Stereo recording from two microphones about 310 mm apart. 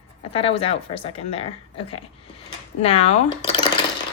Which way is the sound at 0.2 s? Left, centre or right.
Centre.